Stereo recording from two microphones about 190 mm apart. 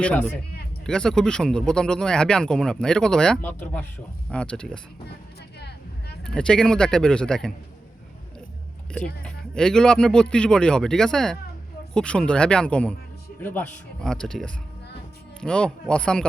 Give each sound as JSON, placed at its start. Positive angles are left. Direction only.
{"t": 0.0, "sound": "speech", "side_deg": 5}
{"t": 5.5, "sound": "a sound", "side_deg": 60}
{"t": 6.2, "sound": "speech", "side_deg": 5}
{"t": 9.2, "sound": "speech", "side_deg": 5}